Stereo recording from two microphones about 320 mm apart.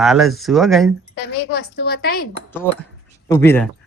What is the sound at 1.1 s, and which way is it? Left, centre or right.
Speech, left.